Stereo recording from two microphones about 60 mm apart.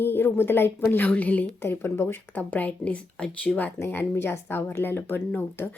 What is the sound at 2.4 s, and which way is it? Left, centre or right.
Speech, left.